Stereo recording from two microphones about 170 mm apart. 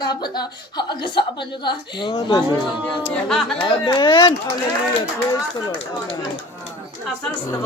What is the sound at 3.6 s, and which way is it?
Speech, 25° left (ahead or behind).